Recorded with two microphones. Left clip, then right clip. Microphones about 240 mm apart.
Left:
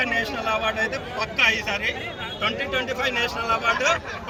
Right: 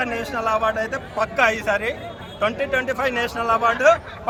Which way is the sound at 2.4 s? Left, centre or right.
Centre.